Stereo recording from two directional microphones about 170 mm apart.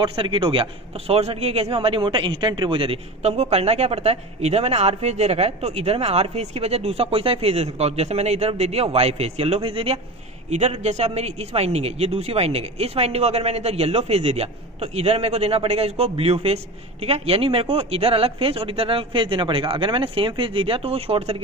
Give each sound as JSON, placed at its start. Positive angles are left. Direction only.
{"t": 0.0, "sound": "a man's voice", "side_deg": -30}